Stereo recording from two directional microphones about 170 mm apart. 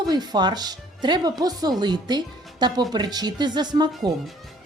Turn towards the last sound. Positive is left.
turn(degrees=-25)  # may be behind; listen again after turning